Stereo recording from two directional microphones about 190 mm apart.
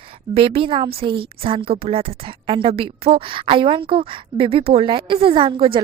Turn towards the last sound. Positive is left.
turn(degrees=-30)  # may be behind; listen again after turning